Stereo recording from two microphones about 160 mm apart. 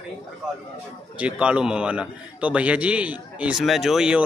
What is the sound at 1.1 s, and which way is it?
A man's voice, 5° right (ahead or behind).